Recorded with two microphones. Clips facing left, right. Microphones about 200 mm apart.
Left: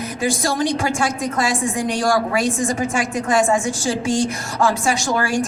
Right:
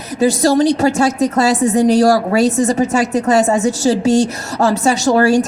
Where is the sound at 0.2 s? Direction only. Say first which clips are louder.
Right 9 dB; 40° right (ahead or behind).